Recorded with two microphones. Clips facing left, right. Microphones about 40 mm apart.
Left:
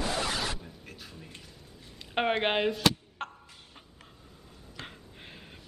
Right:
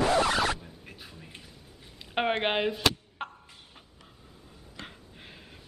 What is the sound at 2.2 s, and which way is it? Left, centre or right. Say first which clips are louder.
Speech: even; centre.